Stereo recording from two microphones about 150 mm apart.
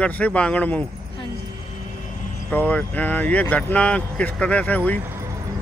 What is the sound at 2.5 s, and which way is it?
Speech, 10° left (ahead or behind).